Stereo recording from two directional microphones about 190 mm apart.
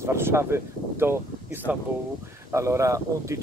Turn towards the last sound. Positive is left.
turn(degrees=-15)  # may be behind; listen again after turning